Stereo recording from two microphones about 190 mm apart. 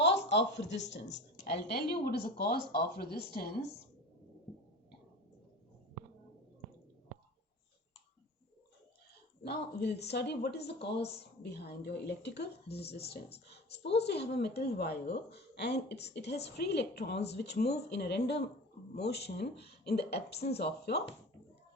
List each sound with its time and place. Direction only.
0.0 s speech: 65° left (ahead or behind)
1.0 s a woman's voice: 40° left (ahead or behind)
1.7 s speech: 55° left (ahead or behind)
9.4 s speech: 60° left (ahead or behind)